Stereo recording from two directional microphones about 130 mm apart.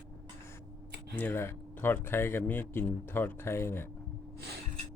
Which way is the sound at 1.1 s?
15° left (ahead or behind).